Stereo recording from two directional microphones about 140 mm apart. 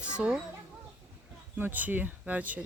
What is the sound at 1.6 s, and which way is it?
Speech, 15° right (ahead or behind).